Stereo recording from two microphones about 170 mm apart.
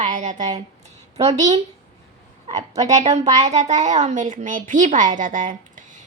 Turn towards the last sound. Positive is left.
turn(degrees=-50)  # may be behind; listen again after turning